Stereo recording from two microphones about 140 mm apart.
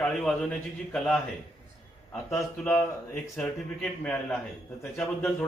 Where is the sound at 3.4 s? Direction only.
5° left (ahead or behind).